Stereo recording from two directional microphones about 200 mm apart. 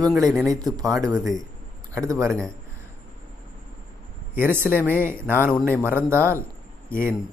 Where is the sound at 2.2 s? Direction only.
Centre (ahead or behind).